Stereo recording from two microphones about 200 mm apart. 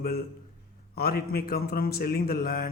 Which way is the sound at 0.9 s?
50° left (ahead or behind).